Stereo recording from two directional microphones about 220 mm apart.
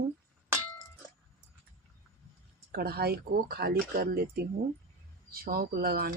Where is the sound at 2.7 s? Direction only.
45° right (ahead or behind).